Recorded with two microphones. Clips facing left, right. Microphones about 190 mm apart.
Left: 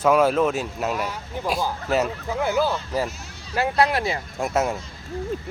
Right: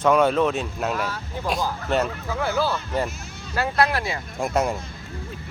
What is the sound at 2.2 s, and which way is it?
Speech, 20° left (ahead or behind).